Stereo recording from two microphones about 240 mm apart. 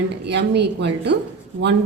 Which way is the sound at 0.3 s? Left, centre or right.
Right.